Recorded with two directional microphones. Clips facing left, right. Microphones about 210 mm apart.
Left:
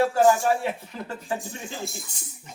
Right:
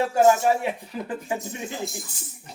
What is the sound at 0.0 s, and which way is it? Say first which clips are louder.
Speech: right 1 dB; 20° right (ahead or behind).